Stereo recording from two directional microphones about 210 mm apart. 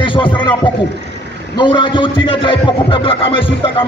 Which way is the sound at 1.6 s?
20° left (ahead or behind).